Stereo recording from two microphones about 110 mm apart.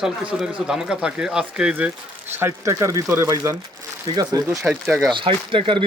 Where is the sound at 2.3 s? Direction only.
25° right (ahead or behind).